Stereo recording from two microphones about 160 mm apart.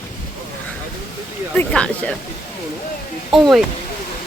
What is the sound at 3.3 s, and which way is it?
Speech, centre (ahead or behind).